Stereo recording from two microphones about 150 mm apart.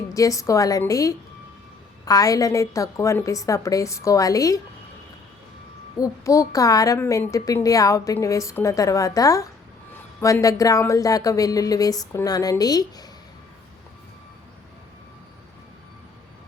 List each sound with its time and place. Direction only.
0.1 s a woman's voice: 20° left (ahead or behind)
6.0 s a woman's voice: 20° left (ahead or behind)